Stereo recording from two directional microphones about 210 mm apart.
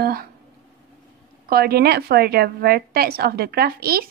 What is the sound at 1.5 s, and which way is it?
A woman's voice, 45° right (ahead or behind).